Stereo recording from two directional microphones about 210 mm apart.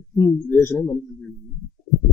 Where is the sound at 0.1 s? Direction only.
15° left (ahead or behind).